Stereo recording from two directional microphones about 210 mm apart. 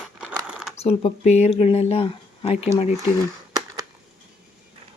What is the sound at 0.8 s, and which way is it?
Speech, 30° left (ahead or behind).